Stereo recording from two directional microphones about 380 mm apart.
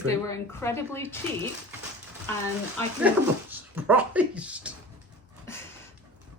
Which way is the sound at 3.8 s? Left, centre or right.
Centre.